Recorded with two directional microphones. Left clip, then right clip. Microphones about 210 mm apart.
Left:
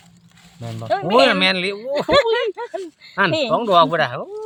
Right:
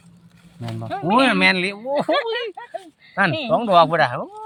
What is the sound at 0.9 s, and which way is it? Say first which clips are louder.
Speech: left 5 dB; 55° left (ahead or behind).